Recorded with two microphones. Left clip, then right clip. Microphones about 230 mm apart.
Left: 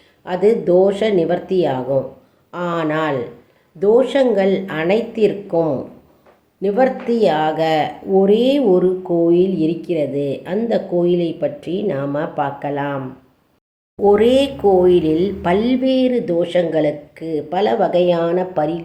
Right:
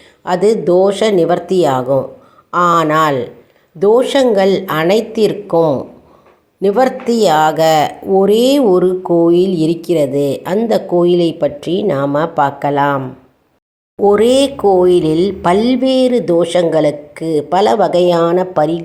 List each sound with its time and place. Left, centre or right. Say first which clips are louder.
0.3 s speech: right 3 dB; centre
14.0 s speech: right 3 dB; right